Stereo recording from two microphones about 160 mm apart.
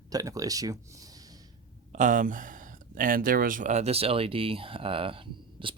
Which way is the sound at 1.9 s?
55° right (ahead or behind).